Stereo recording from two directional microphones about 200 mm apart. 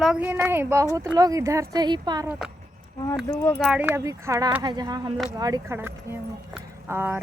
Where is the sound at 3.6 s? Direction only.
5° right (ahead or behind).